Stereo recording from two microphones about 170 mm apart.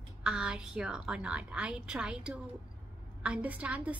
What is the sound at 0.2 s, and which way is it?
A woman's voice, 5° right (ahead or behind).